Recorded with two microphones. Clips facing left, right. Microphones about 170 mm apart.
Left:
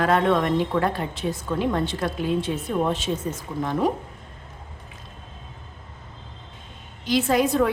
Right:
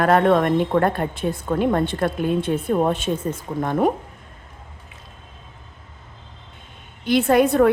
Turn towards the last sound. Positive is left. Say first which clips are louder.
# right 5 dB
turn(degrees=-60)  # may be behind; listen again after turning